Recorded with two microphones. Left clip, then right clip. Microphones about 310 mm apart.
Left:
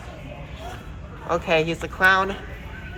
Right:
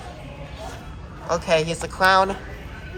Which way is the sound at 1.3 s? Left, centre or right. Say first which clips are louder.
Right 1 dB; centre.